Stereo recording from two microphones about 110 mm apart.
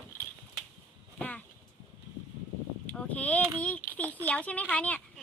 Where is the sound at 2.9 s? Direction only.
15° left (ahead or behind).